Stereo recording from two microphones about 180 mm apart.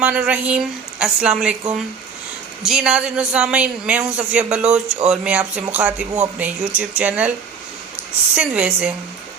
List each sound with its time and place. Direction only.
0.0 s speech: 5° right (ahead or behind)